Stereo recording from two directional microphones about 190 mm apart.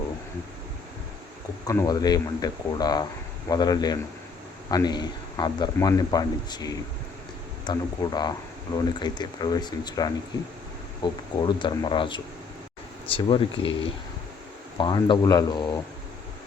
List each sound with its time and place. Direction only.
1.6 s speech: 20° left (ahead or behind)
11.3 s speech: 20° left (ahead or behind)